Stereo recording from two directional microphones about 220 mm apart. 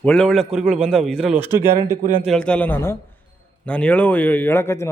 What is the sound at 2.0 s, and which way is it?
Speech, 35° right (ahead or behind).